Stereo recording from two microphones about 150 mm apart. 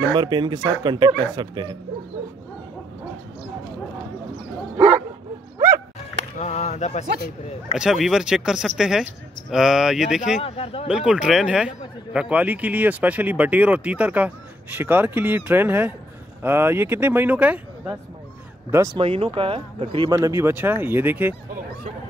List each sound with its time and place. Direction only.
0.1 s speech: 30° right (ahead or behind)
6.3 s speech: 50° left (ahead or behind)
7.7 s a man's voice: 5° right (ahead or behind)
10.4 s speech: 40° left (ahead or behind)
10.9 s a man's voice: 5° right (ahead or behind)
18.9 s speech: 35° right (ahead or behind)
20.1 s a man's voice: 20° right (ahead or behind)